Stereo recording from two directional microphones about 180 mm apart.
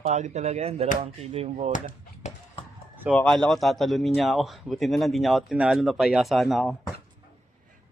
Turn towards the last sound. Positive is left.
turn(degrees=0)  # may be behind; listen again after turning